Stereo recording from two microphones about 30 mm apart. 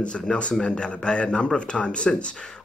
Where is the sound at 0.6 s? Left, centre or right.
Left.